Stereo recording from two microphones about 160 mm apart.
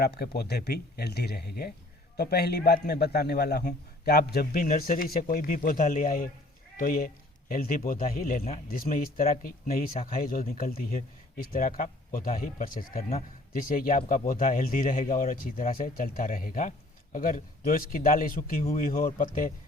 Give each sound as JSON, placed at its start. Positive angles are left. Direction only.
{"t": 0.0, "sound": "a man's voice", "side_deg": 85}